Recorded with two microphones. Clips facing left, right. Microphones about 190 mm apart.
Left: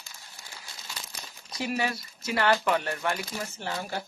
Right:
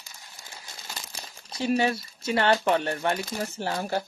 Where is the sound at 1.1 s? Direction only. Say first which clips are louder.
Right 2 dB; 30° right (ahead or behind).